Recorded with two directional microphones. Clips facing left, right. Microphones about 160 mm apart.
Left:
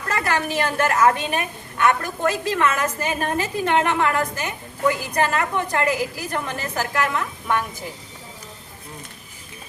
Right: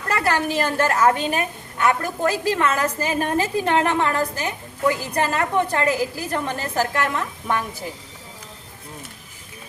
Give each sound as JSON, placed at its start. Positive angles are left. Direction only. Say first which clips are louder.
{"t": 0.1, "sound": "a woman's voice", "louder": "right 2 dB", "side_deg": -30}